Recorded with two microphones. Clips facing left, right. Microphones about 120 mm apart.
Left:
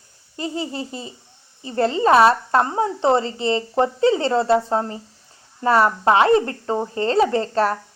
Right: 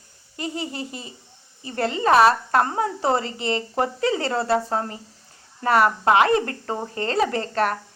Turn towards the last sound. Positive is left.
turn(degrees=30)  # may be behind; listen again after turning